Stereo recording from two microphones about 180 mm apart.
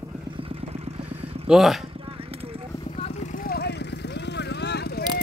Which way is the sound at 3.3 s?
55° left (ahead or behind).